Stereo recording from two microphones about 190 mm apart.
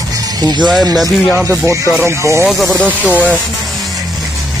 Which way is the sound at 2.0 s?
15° right (ahead or behind).